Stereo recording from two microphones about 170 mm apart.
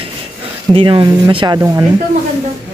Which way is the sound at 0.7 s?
30° right (ahead or behind).